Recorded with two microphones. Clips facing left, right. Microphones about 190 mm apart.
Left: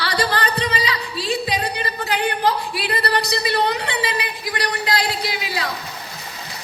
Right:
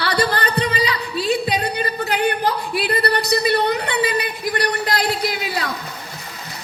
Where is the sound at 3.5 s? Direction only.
50° right (ahead or behind).